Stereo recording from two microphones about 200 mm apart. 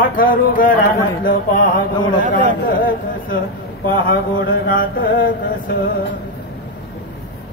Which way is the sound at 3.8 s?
50° left (ahead or behind).